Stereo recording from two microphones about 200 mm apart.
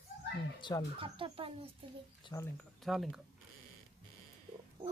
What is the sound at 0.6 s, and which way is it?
Speech, 25° left (ahead or behind).